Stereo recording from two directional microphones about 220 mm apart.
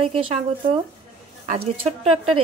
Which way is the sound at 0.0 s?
25° right (ahead or behind).